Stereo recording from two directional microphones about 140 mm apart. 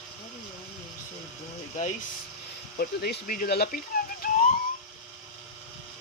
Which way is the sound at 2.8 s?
90° left.